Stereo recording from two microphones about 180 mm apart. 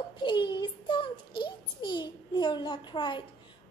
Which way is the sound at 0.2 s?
25° left (ahead or behind).